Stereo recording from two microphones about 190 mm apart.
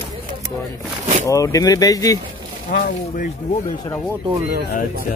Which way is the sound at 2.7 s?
50° left (ahead or behind).